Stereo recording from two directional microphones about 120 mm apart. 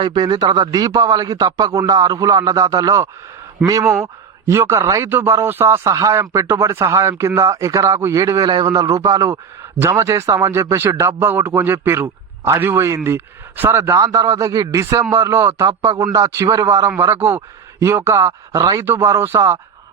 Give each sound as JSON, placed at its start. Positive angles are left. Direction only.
{"t": 0.0, "sound": "a man's voice", "side_deg": -40}